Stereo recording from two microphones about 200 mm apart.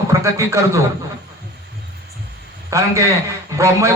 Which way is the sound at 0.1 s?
15° right (ahead or behind).